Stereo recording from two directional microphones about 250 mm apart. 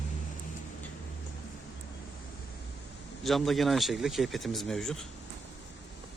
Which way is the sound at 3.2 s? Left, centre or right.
Centre.